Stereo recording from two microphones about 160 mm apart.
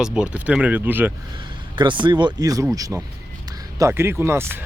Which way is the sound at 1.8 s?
30° right (ahead or behind).